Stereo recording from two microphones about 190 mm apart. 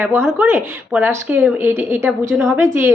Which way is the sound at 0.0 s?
10° right (ahead or behind).